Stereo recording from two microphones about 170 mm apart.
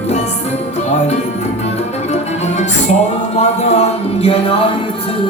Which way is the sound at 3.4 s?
35° left (ahead or behind).